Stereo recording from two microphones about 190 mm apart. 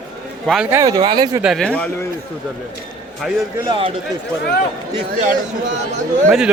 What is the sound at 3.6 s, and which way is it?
Speech, 25° right (ahead or behind).